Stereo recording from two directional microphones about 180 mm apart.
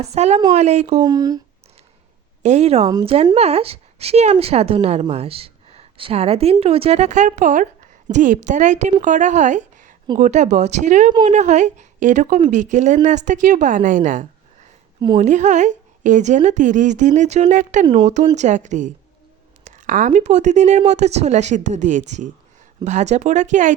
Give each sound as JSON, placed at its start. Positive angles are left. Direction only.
{"t": 0.0, "sound": "speech", "side_deg": -35}
{"t": 1.0, "sound": "speech", "side_deg": -20}
{"t": 2.4, "sound": "speech", "side_deg": -40}
{"t": 2.8, "sound": "a woman's voice", "side_deg": -25}
{"t": 17.8, "sound": "speech", "side_deg": -25}
{"t": 18.3, "sound": "a woman's voice", "side_deg": -40}